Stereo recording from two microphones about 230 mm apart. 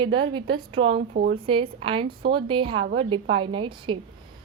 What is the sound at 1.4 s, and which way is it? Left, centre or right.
A woman's voice, right.